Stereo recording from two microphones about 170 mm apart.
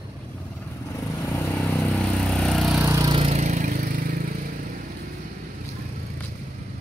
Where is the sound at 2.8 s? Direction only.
20° right (ahead or behind).